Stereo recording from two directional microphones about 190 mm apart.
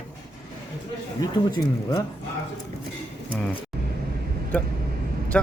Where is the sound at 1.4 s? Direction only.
20° left (ahead or behind).